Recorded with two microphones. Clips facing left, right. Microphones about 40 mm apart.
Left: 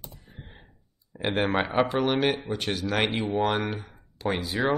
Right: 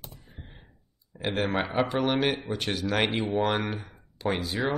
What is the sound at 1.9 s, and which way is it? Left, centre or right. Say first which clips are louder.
Speech: left 1 dB; centre.